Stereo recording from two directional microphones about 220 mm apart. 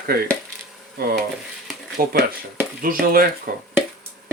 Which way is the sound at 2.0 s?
45° right (ahead or behind).